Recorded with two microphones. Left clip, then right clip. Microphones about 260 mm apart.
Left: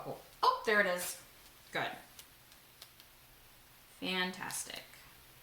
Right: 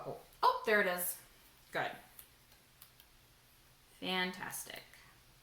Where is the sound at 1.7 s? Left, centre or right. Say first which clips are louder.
Left 1 dB; centre.